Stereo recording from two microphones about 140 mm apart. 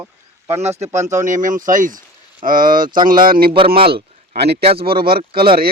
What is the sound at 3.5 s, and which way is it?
Speech, 40° right (ahead or behind).